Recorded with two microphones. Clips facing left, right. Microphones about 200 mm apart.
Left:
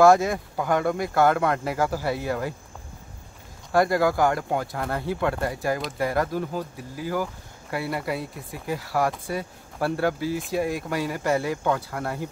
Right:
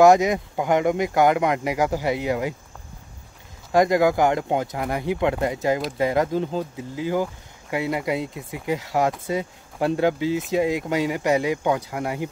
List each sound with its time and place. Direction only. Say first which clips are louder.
0.0 s speech: right 2 dB; 20° right (ahead or behind)
3.7 s speech: right 3 dB; 15° right (ahead or behind)